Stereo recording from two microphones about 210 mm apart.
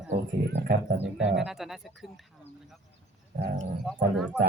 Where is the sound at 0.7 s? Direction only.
45° right (ahead or behind).